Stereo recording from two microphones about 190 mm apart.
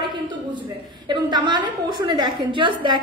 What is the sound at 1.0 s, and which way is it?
A woman's voice, 20° right (ahead or behind).